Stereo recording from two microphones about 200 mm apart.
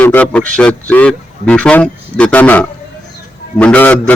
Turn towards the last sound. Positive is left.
turn(degrees=10)  # may be behind; listen again after turning